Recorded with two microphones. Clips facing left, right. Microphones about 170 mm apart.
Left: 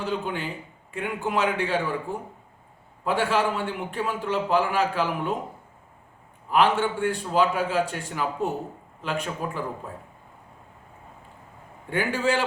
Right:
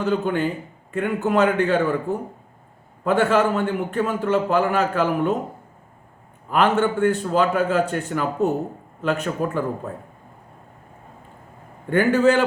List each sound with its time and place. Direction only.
0.0 s a man's voice: 50° right (ahead or behind)
6.5 s a man's voice: 50° right (ahead or behind)
11.9 s a man's voice: 50° right (ahead or behind)